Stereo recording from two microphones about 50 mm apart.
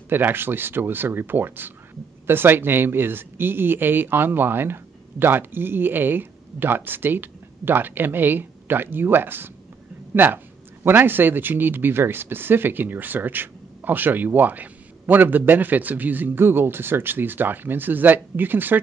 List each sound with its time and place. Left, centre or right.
0.1 s speech: right